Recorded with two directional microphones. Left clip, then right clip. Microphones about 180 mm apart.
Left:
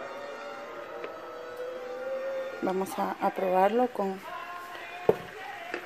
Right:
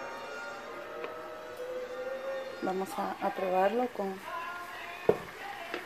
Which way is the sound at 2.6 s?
35° left (ahead or behind).